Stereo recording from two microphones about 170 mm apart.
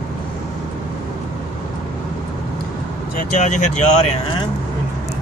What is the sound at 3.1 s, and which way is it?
Speech, 45° left (ahead or behind).